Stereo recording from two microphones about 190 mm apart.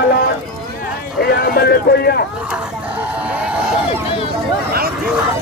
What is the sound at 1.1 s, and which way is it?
Speech, 55° left (ahead or behind).